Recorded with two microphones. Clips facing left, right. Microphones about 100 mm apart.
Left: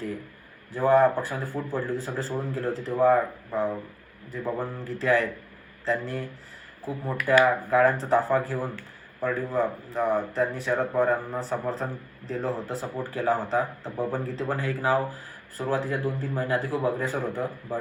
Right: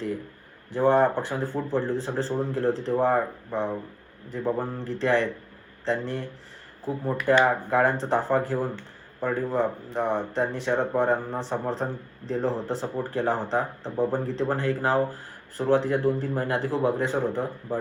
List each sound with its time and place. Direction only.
0.7 s a man's voice: 25° right (ahead or behind)